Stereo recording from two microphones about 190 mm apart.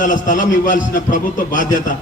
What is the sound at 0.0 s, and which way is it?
A man's voice, 45° left (ahead or behind).